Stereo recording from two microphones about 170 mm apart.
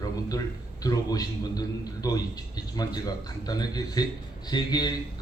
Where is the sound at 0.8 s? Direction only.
20° left (ahead or behind).